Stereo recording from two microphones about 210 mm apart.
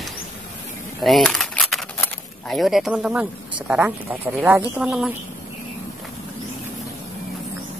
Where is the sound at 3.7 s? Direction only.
5° right (ahead or behind).